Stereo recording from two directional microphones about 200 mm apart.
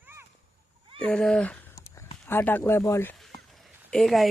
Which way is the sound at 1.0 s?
5° left (ahead or behind).